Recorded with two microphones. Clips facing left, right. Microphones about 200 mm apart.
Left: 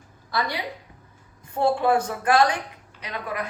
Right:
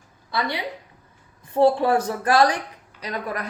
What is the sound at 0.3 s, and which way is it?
Speech, 25° right (ahead or behind).